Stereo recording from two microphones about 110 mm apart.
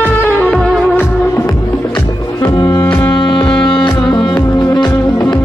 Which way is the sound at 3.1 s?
50° left (ahead or behind).